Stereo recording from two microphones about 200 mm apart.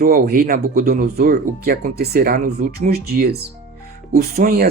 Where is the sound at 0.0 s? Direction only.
45° right (ahead or behind).